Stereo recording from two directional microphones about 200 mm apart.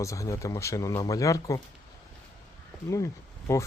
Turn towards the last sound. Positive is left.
turn(degrees=15)  # may be behind; listen again after turning